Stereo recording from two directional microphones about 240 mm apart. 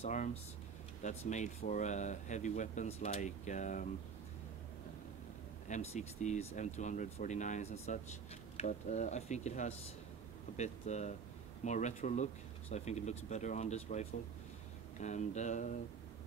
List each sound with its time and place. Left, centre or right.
0.0 s speech: left
5.7 s speech: left